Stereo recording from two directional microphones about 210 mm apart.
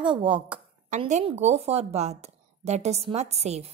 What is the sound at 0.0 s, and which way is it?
Speech, 25° right (ahead or behind).